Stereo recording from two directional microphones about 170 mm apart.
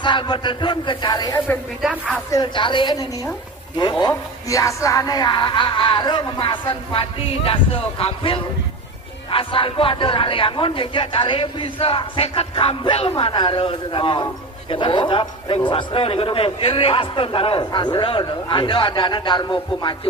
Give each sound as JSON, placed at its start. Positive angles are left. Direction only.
{"t": 0.0, "sound": "a man's voice", "side_deg": 30}
{"t": 1.8, "sound": "speech", "side_deg": -5}
{"t": 2.3, "sound": "a man's voice", "side_deg": 30}